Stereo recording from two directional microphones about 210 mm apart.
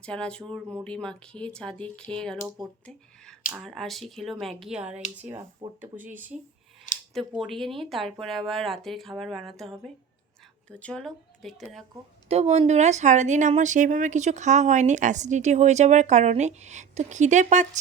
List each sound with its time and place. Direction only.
0.0 s speech: 5° left (ahead or behind)
3.5 s speech: centre (ahead or behind)
12.3 s speech: 30° right (ahead or behind)